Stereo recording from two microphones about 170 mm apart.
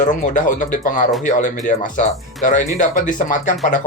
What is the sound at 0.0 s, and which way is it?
Speech, 50° left (ahead or behind).